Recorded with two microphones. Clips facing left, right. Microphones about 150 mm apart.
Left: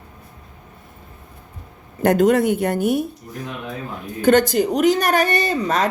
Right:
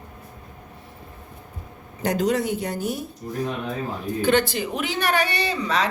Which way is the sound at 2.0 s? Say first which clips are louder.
Left 7 dB; 55° left (ahead or behind).